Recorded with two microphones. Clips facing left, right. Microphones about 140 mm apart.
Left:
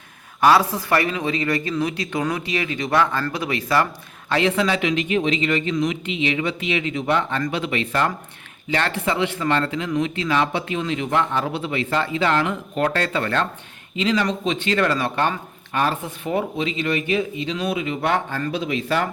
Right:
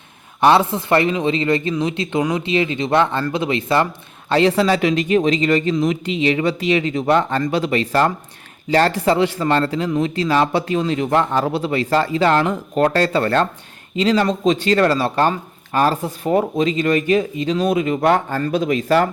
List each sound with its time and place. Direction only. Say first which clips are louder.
0.4 s speech: right 2 dB; 25° right (ahead or behind)
4.3 s speech: right 5 dB; 35° right (ahead or behind)